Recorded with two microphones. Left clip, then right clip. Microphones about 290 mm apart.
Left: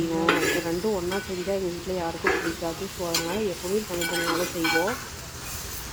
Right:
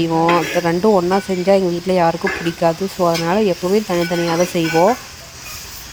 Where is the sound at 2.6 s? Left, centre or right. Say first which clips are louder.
Right 15 dB; right.